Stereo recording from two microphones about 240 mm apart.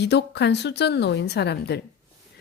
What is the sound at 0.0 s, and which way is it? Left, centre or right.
A woman's voice, left.